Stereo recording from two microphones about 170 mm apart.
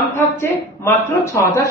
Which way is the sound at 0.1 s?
15° left (ahead or behind).